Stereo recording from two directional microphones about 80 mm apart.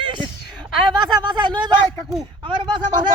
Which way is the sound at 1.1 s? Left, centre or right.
Right.